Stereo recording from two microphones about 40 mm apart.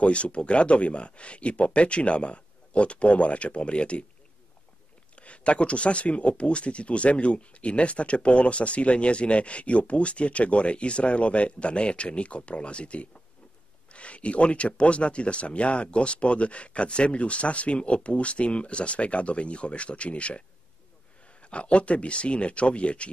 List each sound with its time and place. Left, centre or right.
0.0 s speech: left
5.1 s speech: left